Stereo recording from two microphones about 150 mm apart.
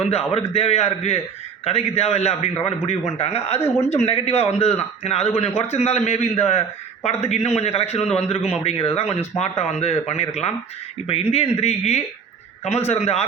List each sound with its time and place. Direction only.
0.0 s a man's voice: 40° left (ahead or behind)